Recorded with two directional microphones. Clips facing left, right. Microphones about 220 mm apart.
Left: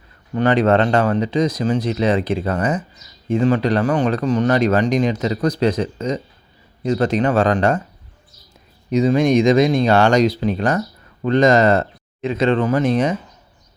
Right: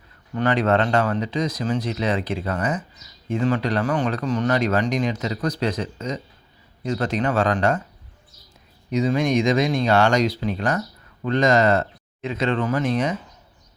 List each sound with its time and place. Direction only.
0.3 s speech: 25° left (ahead or behind)
8.9 s speech: 30° left (ahead or behind)